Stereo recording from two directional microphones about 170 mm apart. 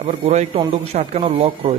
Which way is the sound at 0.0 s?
40° right (ahead or behind).